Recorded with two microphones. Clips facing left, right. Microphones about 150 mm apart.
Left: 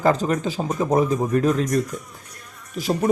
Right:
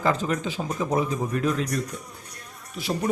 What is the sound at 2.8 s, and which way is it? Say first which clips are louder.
Speech: left 6 dB; 40° left (ahead or behind).